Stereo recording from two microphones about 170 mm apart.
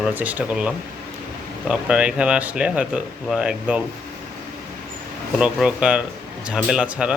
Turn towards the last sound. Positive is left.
turn(degrees=-5)  # may be behind; listen again after turning